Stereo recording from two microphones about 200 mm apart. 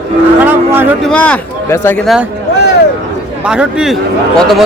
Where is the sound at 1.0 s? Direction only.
5° left (ahead or behind).